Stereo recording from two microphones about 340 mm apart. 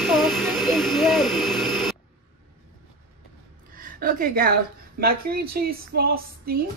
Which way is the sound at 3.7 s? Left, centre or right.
Right.